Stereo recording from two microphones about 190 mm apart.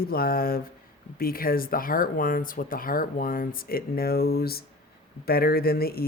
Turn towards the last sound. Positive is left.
turn(degrees=55)  # may be behind; listen again after turning